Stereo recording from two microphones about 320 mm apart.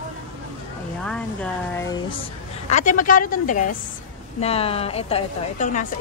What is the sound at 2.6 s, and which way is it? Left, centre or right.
Speech, left.